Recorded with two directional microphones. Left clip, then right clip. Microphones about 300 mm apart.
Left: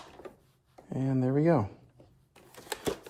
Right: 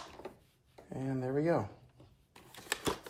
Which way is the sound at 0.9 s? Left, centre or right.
Centre.